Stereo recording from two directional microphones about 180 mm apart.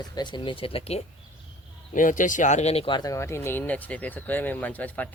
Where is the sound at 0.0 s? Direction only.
25° left (ahead or behind).